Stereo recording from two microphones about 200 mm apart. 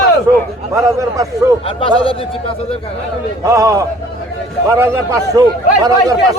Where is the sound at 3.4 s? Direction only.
15° right (ahead or behind).